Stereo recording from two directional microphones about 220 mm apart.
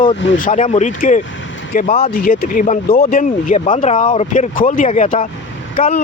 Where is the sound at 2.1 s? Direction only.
40° left (ahead or behind).